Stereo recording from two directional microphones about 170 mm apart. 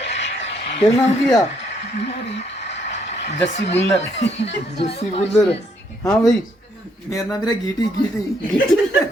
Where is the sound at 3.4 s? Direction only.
40° left (ahead or behind).